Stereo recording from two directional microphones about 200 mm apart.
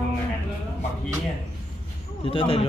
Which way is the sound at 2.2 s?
25° left (ahead or behind).